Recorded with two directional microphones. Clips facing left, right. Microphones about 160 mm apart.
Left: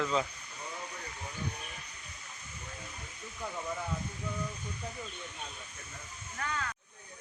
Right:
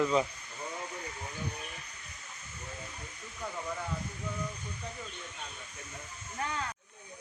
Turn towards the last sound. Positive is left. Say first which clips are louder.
# right 1 dB
turn(degrees=-25)  # may be behind; listen again after turning